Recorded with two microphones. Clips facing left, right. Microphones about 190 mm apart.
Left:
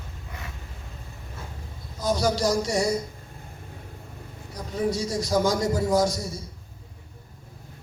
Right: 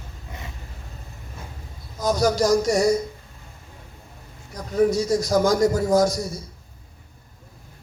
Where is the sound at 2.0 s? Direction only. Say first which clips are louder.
Right 3 dB; 45° right (ahead or behind).